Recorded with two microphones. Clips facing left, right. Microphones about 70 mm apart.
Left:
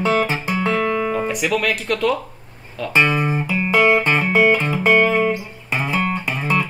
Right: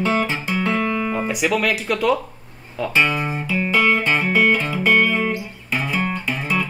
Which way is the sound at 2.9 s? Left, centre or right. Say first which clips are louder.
Left 3 dB; left.